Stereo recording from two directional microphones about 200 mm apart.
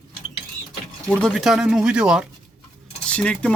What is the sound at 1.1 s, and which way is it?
Speech, 5° left (ahead or behind).